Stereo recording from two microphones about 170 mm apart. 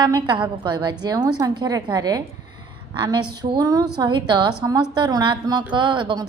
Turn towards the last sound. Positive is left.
turn(degrees=-30)  # may be behind; listen again after turning